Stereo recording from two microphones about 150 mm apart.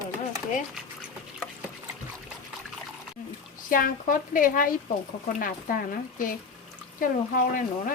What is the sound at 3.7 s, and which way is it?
A woman's voice, 65° left (ahead or behind).